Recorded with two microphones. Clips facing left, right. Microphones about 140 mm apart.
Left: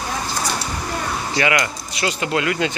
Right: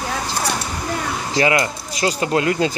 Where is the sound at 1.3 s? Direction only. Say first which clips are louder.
Right 3 dB; 30° right (ahead or behind).